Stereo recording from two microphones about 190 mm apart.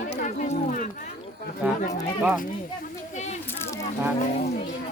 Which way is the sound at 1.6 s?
5° right (ahead or behind).